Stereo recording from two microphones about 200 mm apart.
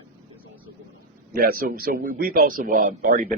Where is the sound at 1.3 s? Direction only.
45° right (ahead or behind).